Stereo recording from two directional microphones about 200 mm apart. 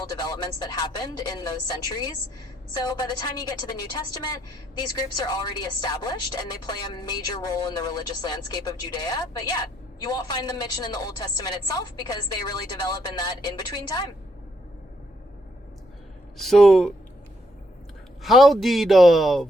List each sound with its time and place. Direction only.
0.0 s a woman's voice: 20° left (ahead or behind)
16.4 s a man's voice: centre (ahead or behind)
18.2 s a man's voice: centre (ahead or behind)